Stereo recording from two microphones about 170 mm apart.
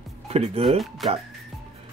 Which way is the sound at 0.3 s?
35° right (ahead or behind).